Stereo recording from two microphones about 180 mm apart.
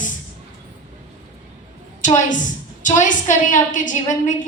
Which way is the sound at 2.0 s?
45° left (ahead or behind).